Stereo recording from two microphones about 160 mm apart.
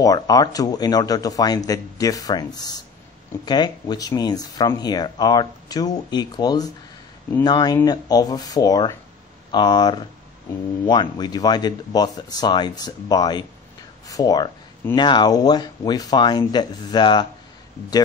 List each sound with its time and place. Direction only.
0.0 s speech: 25° left (ahead or behind)